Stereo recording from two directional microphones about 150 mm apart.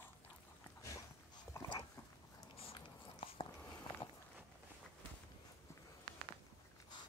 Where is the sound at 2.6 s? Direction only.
40° left (ahead or behind).